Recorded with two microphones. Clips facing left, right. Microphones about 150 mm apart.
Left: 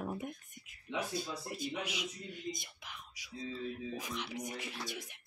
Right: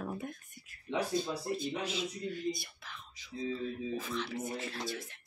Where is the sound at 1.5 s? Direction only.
10° left (ahead or behind).